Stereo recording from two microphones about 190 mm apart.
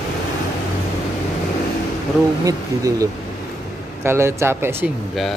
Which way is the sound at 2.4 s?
20° right (ahead or behind).